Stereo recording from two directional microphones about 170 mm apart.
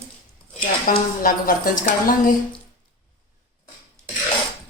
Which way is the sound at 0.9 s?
55° left (ahead or behind).